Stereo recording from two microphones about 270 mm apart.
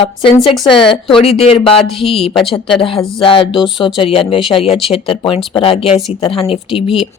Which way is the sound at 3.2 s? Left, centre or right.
Centre.